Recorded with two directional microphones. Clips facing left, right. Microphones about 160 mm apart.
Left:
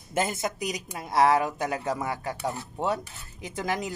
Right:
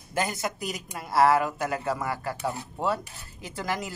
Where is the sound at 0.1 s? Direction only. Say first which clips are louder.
Left 1 dB; 20° left (ahead or behind).